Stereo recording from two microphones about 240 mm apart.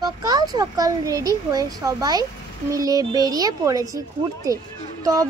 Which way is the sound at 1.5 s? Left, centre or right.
Centre.